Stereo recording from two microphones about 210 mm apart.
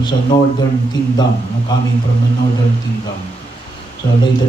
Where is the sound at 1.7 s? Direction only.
20° left (ahead or behind).